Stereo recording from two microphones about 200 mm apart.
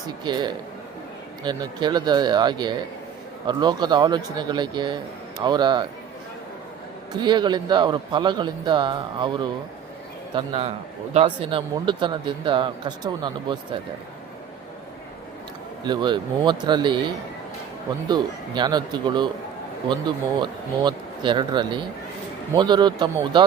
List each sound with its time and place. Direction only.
0.3 s a man's voice: 20° right (ahead or behind)
7.1 s a man's voice: 20° right (ahead or behind)
15.8 s a man's voice: 20° right (ahead or behind)